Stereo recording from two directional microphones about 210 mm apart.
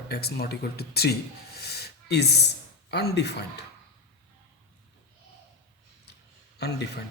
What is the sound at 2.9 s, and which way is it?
Speech, 50° left (ahead or behind).